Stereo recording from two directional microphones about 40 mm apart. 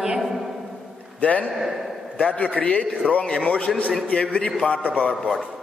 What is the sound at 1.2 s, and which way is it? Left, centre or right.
A man's voice, left.